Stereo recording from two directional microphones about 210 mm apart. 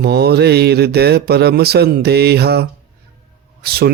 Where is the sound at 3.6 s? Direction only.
50° right (ahead or behind).